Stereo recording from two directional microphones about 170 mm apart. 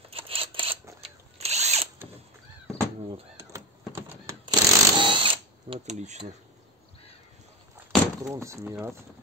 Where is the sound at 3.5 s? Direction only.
15° right (ahead or behind).